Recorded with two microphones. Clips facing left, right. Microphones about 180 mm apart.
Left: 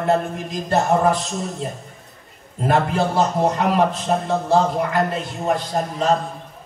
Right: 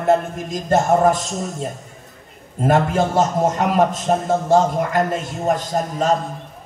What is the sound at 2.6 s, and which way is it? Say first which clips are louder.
A man's voice: right 2 dB; 40° right (ahead or behind).